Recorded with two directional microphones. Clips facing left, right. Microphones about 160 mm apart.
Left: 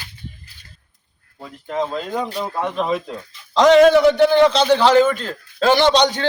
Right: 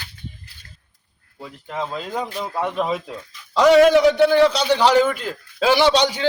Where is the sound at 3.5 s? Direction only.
10° right (ahead or behind).